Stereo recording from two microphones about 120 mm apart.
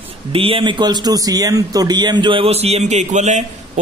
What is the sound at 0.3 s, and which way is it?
A man's voice, 50° right (ahead or behind).